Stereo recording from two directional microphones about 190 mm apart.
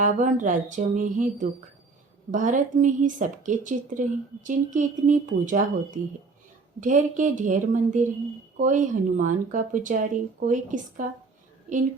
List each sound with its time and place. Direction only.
0.0 s speech: 40° right (ahead or behind)